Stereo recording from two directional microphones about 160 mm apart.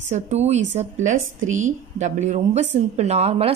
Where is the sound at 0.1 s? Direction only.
45° right (ahead or behind).